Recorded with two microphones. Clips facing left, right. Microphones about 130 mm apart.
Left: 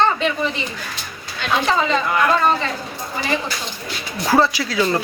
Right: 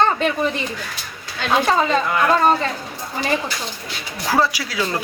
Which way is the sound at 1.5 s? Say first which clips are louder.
Right 1 dB; 45° right (ahead or behind).